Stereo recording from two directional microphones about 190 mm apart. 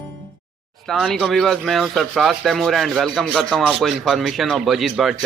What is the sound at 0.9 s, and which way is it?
Speech, centre (ahead or behind).